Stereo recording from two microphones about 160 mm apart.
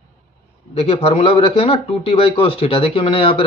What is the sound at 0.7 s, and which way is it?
Speech, 40° left (ahead or behind).